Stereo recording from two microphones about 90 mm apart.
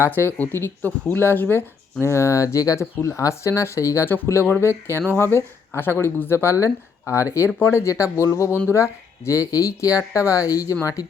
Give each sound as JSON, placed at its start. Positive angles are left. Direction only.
{"t": 0.0, "sound": "speech", "side_deg": 25}